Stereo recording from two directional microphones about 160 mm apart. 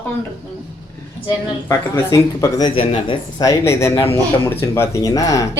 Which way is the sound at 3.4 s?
15° left (ahead or behind).